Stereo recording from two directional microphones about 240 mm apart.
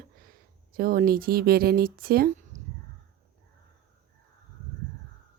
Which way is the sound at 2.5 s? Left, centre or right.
Right.